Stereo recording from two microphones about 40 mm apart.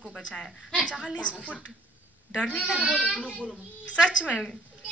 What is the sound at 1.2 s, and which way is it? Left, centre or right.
Speech, left.